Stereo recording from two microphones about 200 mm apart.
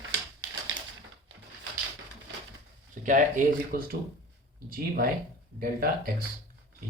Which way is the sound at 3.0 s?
40° right (ahead or behind).